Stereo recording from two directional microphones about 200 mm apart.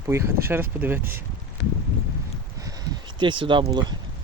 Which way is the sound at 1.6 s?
65° left (ahead or behind).